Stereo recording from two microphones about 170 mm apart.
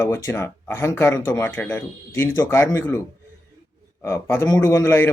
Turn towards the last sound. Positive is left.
turn(degrees=15)  # may be behind; listen again after turning